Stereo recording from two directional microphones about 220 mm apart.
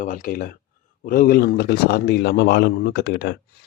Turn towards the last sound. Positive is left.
turn(degrees=50)  # may be behind; listen again after turning